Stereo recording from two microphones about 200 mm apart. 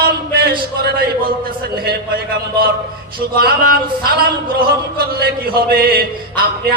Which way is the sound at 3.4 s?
50° right (ahead or behind).